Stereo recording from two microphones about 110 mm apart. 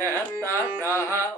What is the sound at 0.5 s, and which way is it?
Music, 25° left (ahead or behind).